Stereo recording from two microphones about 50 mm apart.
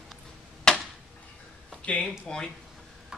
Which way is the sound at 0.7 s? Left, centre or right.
Centre.